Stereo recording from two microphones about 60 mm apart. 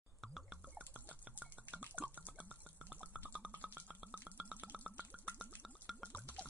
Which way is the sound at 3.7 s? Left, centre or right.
Right.